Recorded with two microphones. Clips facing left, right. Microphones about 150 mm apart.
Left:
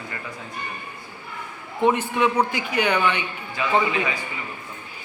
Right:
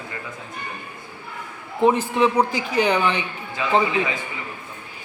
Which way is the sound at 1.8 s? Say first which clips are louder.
Right 2 dB; 35° right (ahead or behind).